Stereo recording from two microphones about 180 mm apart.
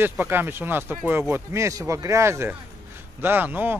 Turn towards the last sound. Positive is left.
turn(degrees=-10)  # may be behind; listen again after turning